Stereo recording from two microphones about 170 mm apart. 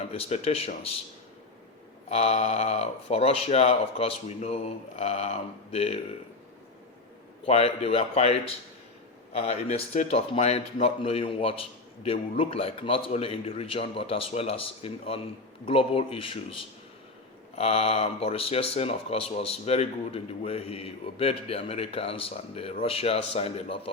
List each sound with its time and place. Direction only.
0.1 s speech: 35° left (ahead or behind)
2.0 s speech: 35° left (ahead or behind)
7.4 s speech: 35° left (ahead or behind)
9.4 s speech: 35° left (ahead or behind)